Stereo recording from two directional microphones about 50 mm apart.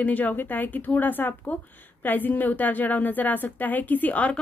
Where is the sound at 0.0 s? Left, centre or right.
Left.